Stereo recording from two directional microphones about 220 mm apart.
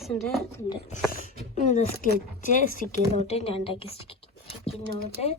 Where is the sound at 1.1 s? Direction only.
35° left (ahead or behind).